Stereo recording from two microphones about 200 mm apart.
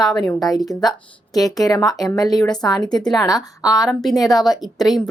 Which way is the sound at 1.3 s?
20° left (ahead or behind).